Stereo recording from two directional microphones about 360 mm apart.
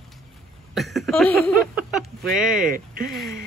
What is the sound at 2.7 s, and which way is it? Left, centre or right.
Speech, right.